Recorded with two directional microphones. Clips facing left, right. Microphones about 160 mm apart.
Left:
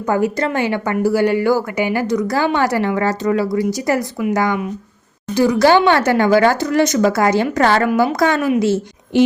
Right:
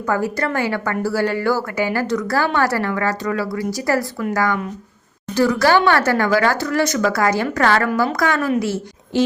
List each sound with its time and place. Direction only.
0.0 s speech: 20° left (ahead or behind)